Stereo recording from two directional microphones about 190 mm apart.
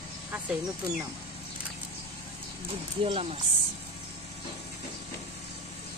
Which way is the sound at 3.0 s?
30° right (ahead or behind).